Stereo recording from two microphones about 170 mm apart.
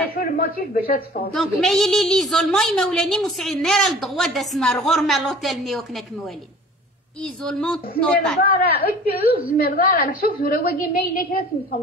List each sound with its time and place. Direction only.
0.1 s a man's voice: 65° left (ahead or behind)
1.3 s a woman's voice: centre (ahead or behind)
7.4 s a woman's voice: 5° left (ahead or behind)
8.5 s a woman's voice: 60° left (ahead or behind)